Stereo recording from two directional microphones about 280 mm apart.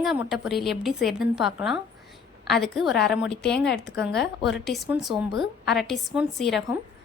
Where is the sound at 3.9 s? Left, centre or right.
Left.